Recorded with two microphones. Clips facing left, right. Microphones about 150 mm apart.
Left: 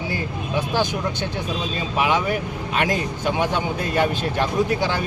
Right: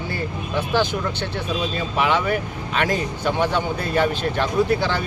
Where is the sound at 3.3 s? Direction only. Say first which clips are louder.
Right 1 dB; 15° left (ahead or behind).